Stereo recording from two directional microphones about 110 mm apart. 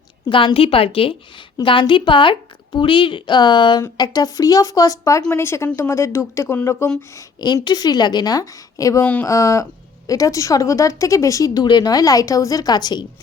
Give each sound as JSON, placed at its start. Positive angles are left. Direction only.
{"t": 0.3, "sound": "a woman's voice", "side_deg": 50}
{"t": 3.8, "sound": "speech", "side_deg": 35}